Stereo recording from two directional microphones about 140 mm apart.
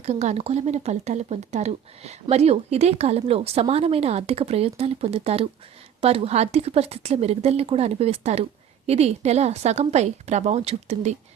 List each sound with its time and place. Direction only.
0.0 s speech: 50° right (ahead or behind)